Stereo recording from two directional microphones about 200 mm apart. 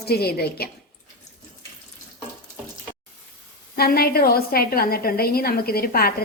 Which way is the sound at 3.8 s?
50° left (ahead or behind).